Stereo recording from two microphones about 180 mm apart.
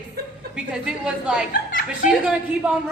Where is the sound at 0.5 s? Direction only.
5° right (ahead or behind).